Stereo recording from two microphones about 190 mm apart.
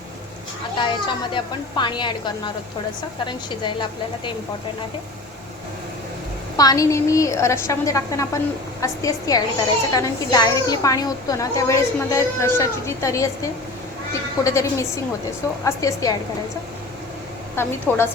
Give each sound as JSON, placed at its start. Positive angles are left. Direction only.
{"t": 0.8, "sound": "a woman's voice", "side_deg": 25}
{"t": 6.6, "sound": "a woman's voice", "side_deg": 20}
{"t": 17.6, "sound": "a woman's voice", "side_deg": 10}